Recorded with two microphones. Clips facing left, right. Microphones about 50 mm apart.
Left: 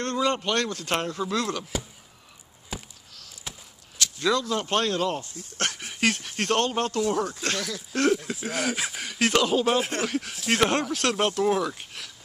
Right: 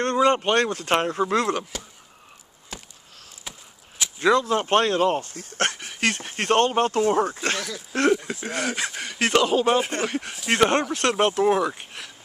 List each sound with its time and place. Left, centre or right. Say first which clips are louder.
0.0 s speech: right 6 dB; right
2.7 s a sound: left 2 dB; centre
4.0 s speech: right 5 dB; right
5.2 s speech: right 5 dB; right
5.8 s a sound: even; centre
6.2 s speech: right 4 dB; right
8.1 s speech: right 3 dB; centre